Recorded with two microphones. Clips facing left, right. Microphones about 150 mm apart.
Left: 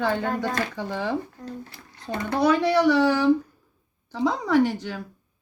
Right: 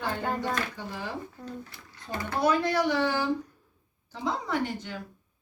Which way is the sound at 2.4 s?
90° left.